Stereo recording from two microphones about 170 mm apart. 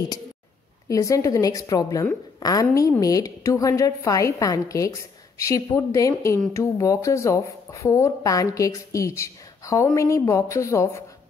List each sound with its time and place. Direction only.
0.8 s a woman's voice: 20° left (ahead or behind)